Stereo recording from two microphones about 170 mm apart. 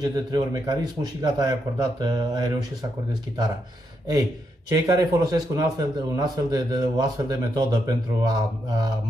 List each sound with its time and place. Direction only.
0.0 s a man's voice: 25° right (ahead or behind)
4.6 s a man's voice: 25° right (ahead or behind)